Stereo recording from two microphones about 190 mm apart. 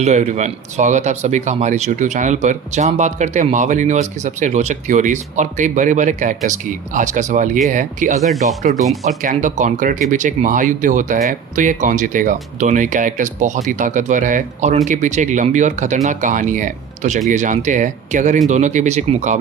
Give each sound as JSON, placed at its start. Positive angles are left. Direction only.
{"t": 0.0, "sound": "speech", "side_deg": -40}
{"t": 8.2, "sound": "speech", "side_deg": 0}
{"t": 9.2, "sound": "speech", "side_deg": -40}